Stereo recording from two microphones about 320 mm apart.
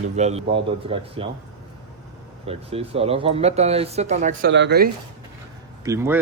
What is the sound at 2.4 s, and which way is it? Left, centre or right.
Speech, centre.